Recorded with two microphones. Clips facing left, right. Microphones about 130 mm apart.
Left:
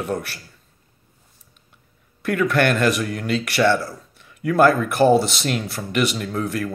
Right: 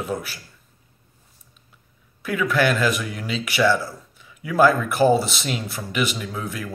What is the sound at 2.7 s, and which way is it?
Speech, centre (ahead or behind).